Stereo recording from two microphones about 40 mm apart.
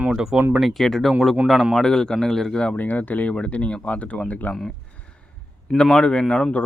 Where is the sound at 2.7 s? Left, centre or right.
Left.